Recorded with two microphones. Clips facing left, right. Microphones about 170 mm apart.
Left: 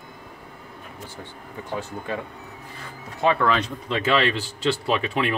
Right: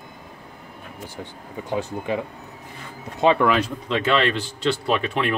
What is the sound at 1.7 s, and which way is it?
Speech, 15° right (ahead or behind).